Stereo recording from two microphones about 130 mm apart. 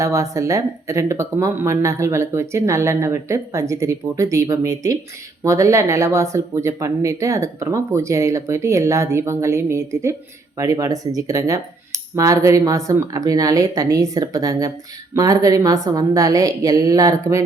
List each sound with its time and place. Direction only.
0.0 s speech: 25° right (ahead or behind)